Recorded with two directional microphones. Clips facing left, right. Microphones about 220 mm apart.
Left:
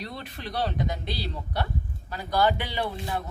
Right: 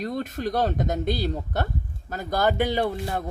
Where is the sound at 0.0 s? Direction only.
45° right (ahead or behind).